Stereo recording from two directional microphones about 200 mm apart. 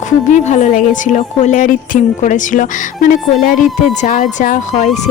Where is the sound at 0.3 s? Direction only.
35° left (ahead or behind).